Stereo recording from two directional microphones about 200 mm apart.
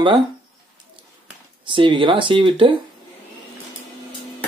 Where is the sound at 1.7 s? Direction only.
25° right (ahead or behind).